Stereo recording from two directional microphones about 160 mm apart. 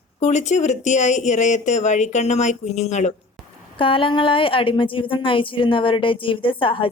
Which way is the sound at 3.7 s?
35° left (ahead or behind).